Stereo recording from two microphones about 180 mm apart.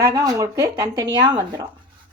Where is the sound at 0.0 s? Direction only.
20° right (ahead or behind).